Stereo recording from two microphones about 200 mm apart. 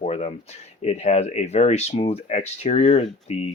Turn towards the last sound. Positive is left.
turn(degrees=30)  # may be behind; listen again after turning